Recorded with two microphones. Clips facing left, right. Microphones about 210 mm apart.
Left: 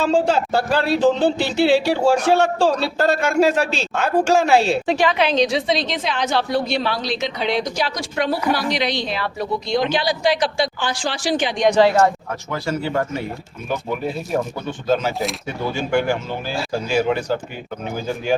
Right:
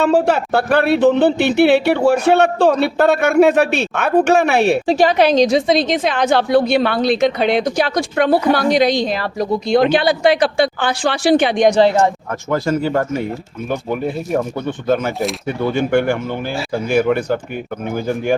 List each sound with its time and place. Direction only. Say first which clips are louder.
0.0 s speech: right 3 dB; 60° right (ahead or behind)
4.9 s a woman's voice: right 5 dB; 40° right (ahead or behind)
9.7 s speech: right 7 dB; 60° right (ahead or behind)
11.8 s speech: left 2 dB; 25° right (ahead or behind)
12.3 s a woman's voice: right 6 dB; 50° right (ahead or behind)